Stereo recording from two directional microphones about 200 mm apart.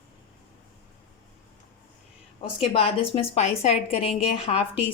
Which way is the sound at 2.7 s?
30° left (ahead or behind).